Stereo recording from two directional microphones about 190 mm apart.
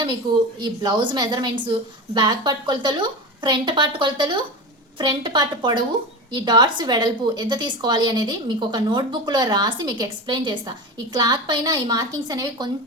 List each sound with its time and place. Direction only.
0.6 s a woman's voice: 20° right (ahead or behind)